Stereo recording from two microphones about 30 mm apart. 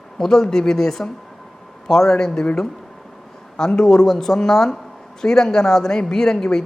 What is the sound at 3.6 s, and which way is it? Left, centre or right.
Speech, left.